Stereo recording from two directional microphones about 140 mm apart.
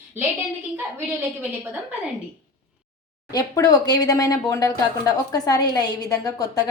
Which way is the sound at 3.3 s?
30° left (ahead or behind).